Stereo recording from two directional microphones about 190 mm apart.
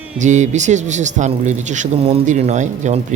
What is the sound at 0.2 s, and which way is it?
A man's voice, 40° right (ahead or behind).